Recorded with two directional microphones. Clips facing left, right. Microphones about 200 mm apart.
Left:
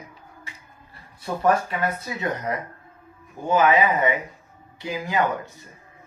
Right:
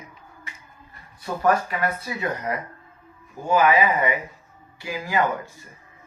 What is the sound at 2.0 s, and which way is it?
Speech, 20° left (ahead or behind).